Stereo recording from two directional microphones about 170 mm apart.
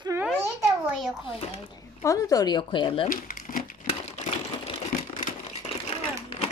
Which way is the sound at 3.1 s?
55° left (ahead or behind).